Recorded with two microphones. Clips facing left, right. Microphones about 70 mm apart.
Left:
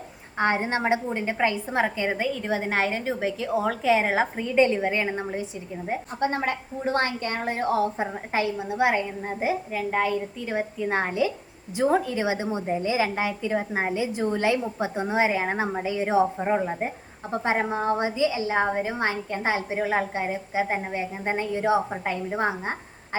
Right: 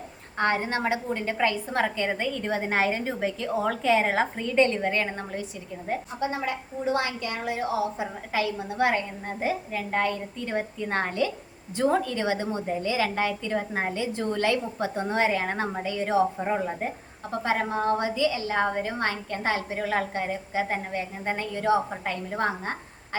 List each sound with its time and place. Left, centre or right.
0.3 s a woman's voice: left
6.1 s a woman's voice: left; by 22.8 s centre